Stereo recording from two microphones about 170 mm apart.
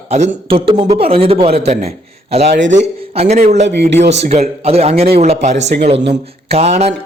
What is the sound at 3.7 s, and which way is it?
Speech, 85° right.